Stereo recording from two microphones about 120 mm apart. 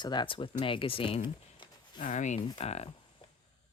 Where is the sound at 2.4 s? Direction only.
55° left (ahead or behind).